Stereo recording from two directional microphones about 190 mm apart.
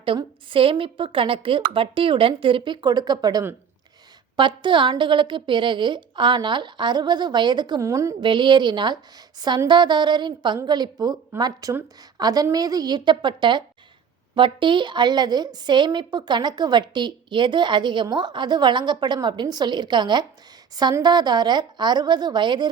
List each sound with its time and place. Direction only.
0.0 s a woman's voice: 25° right (ahead or behind)